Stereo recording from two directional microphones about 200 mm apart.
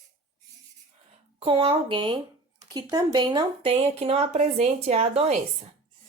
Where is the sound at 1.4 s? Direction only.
25° right (ahead or behind).